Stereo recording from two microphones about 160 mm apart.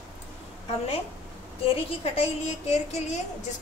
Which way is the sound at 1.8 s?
35° left (ahead or behind).